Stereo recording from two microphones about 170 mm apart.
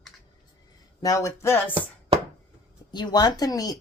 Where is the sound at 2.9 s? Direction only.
25° left (ahead or behind).